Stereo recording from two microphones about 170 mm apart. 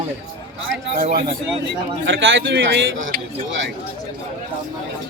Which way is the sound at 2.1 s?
90° right.